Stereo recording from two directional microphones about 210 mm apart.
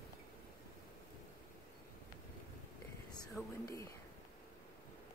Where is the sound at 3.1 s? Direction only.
15° left (ahead or behind).